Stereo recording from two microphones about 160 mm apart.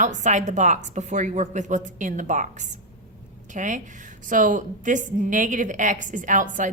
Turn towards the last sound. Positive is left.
turn(degrees=-55)  # may be behind; listen again after turning